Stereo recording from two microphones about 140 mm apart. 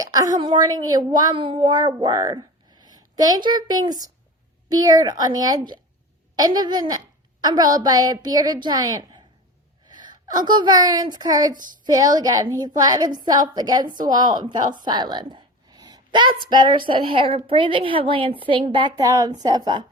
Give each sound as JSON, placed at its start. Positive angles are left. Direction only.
{"t": 0.0, "sound": "a woman's voice", "side_deg": -25}